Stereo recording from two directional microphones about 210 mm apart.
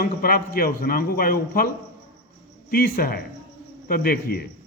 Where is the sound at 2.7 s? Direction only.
45° left (ahead or behind).